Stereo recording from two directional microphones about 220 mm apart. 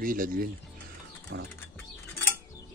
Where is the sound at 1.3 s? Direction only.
50° right (ahead or behind).